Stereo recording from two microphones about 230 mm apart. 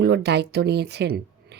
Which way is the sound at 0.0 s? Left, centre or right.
Right.